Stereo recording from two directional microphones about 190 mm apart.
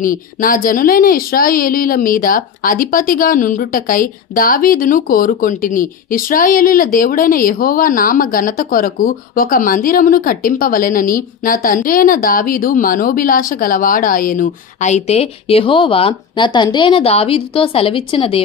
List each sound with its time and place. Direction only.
0.0 s a woman's voice: 45° left (ahead or behind); by 18.4 s 30° left (ahead or behind)